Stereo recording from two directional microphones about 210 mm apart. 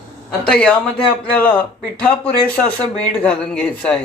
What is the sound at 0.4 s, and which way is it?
A man's voice, 5° left (ahead or behind).